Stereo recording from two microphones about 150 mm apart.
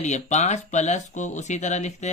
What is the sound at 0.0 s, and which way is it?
Speech, 50° left (ahead or behind).